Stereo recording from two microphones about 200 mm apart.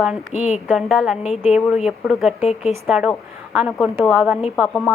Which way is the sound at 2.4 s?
30° left (ahead or behind).